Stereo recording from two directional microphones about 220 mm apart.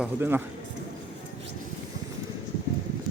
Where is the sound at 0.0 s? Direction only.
10° right (ahead or behind).